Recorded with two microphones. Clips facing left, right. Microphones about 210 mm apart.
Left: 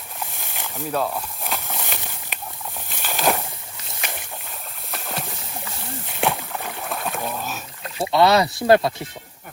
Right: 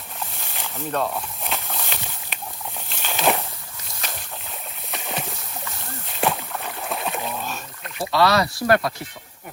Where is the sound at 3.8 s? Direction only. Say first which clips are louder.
Left 2 dB; 15° left (ahead or behind).